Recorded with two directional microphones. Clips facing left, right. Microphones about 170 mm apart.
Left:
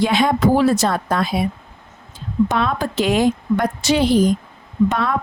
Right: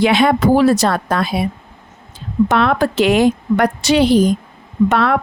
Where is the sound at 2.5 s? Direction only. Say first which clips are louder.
Right 6 dB; 70° right (ahead or behind).